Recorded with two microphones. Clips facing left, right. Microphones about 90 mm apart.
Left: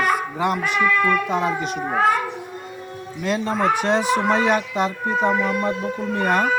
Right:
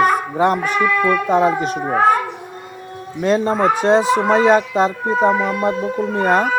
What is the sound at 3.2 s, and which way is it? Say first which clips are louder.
A woman's voice: right 5 dB; 40° right (ahead or behind).